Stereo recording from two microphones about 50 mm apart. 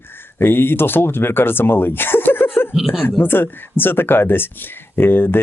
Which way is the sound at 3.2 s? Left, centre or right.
Left.